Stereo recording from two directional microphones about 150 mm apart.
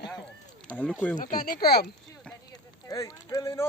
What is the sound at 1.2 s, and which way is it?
Speech, 65° left (ahead or behind).